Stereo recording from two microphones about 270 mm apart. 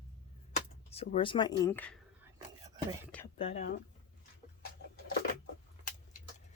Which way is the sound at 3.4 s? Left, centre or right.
Left.